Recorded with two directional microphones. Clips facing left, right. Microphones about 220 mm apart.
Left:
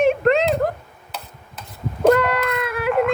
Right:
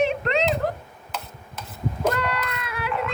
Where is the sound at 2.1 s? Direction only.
50° left (ahead or behind).